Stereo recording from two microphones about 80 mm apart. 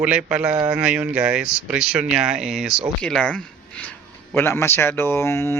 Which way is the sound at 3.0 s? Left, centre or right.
Centre.